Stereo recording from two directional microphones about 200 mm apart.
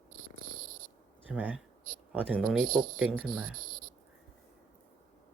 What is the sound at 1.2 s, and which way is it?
Speech, 5° right (ahead or behind).